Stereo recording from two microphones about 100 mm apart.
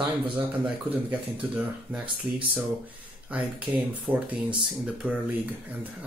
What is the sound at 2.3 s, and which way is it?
Speech, 45° right (ahead or behind).